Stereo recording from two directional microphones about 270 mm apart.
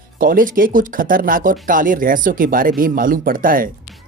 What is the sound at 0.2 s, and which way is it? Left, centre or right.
Speech, right.